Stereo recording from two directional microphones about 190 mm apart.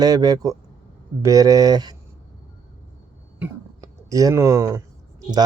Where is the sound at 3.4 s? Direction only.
15° right (ahead or behind).